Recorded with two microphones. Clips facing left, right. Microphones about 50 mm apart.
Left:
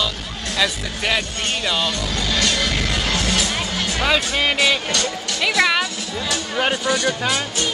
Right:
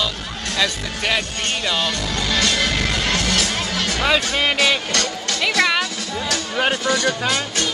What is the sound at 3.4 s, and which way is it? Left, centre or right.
Music, right.